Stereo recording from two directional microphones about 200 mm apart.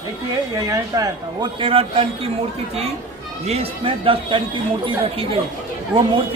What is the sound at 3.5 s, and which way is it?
Speech, 30° right (ahead or behind).